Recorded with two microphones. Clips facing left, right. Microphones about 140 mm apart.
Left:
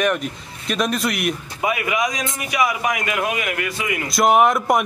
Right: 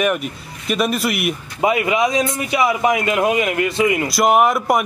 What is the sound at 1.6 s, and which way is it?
A man's voice, 25° right (ahead or behind).